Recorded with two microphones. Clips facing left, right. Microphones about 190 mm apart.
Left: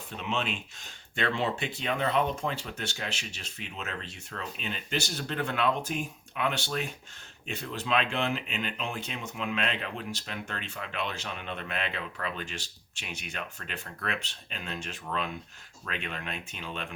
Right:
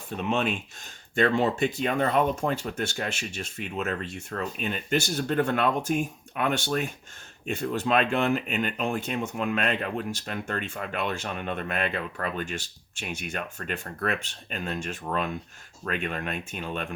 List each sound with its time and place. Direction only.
0.2 s speech: 50° right (ahead or behind)